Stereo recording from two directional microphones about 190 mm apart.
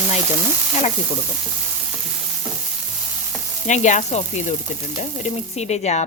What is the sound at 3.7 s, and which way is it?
Speech, 40° left (ahead or behind).